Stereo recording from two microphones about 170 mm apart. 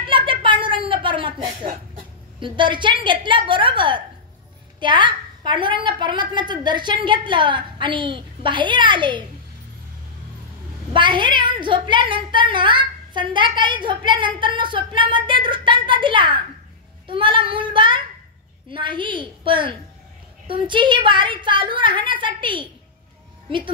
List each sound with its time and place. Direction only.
0.0 s a sound: 30° right (ahead or behind)
4.7 s a woman's voice: 30° right (ahead or behind)
10.9 s a woman's voice: 25° right (ahead or behind)
17.1 s child singing: 30° right (ahead or behind)
18.7 s a woman's voice: 30° right (ahead or behind)